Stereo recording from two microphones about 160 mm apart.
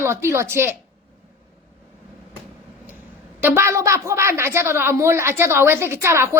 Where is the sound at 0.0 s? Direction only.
15° right (ahead or behind).